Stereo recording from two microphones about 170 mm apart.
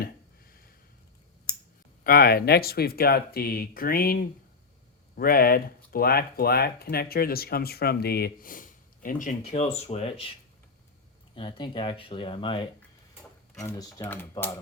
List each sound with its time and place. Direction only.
2.0 s speech: 60° left (ahead or behind)
9.5 s speech: 35° left (ahead or behind)
11.3 s speech: 30° left (ahead or behind)
13.6 s speech: 15° left (ahead or behind)